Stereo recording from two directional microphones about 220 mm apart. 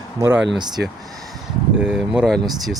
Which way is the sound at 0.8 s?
50° right (ahead or behind).